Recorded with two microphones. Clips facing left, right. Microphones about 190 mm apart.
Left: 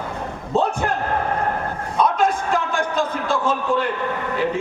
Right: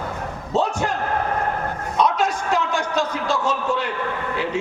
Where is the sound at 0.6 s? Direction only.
55° left (ahead or behind).